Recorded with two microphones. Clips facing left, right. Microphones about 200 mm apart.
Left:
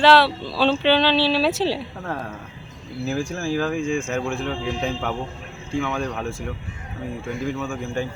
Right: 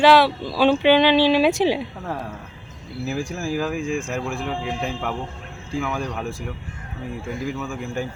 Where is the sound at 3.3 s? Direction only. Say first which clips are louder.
Left 1 dB; 5° right (ahead or behind).